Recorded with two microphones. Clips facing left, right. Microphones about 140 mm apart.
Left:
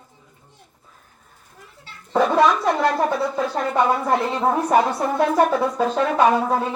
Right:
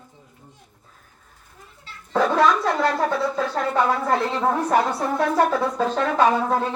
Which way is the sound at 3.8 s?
15° left (ahead or behind).